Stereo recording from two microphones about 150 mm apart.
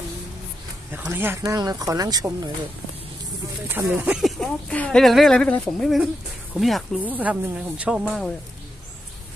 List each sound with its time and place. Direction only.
0.9 s speech: 15° right (ahead or behind)
3.6 s speech: 15° right (ahead or behind)
4.2 s speech: 5° left (ahead or behind)
7.0 s speech: 10° right (ahead or behind)